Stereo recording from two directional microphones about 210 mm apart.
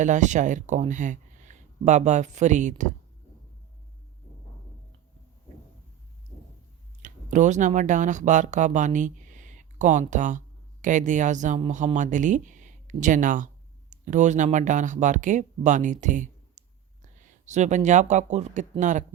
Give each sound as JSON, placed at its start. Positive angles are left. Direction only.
{"t": 0.0, "sound": "speech", "side_deg": -35}
{"t": 7.0, "sound": "speech", "side_deg": -35}